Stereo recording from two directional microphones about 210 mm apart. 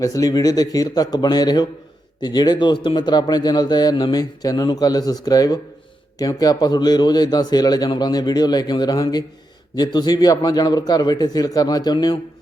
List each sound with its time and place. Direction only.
0.0 s a man's voice: 15° left (ahead or behind)